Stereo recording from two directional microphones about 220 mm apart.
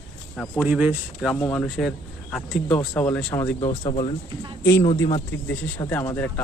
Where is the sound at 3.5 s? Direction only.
25° left (ahead or behind).